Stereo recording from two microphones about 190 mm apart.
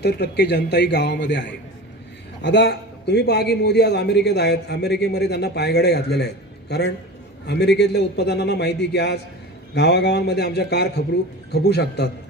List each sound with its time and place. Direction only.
0.0 s a man's voice: 60° left (ahead or behind)